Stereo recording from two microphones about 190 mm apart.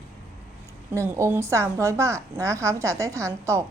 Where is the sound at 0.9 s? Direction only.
15° right (ahead or behind).